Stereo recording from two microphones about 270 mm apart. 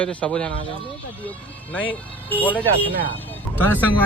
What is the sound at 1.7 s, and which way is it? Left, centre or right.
Speech, centre.